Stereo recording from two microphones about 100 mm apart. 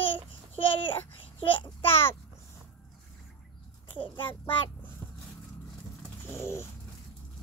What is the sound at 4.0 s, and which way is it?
Speech, 60° left (ahead or behind).